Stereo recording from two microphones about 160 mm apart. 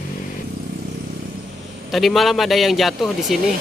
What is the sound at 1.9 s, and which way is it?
Speech, centre (ahead or behind).